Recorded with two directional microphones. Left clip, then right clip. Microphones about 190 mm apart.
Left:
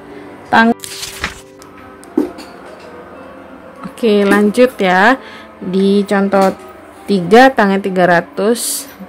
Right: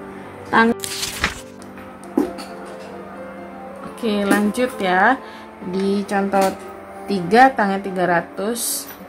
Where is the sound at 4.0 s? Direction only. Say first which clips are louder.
Left 8 dB; 35° left (ahead or behind).